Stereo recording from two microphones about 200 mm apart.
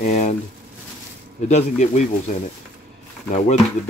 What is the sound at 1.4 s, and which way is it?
Speech, 35° left (ahead or behind).